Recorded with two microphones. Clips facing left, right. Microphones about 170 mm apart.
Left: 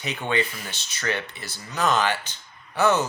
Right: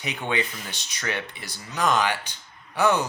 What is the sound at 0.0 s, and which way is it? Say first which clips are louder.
Speech: left 2 dB; 15° right (ahead or behind).